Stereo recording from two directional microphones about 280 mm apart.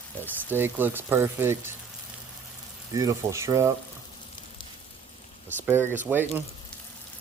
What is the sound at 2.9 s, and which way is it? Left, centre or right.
Speech, centre.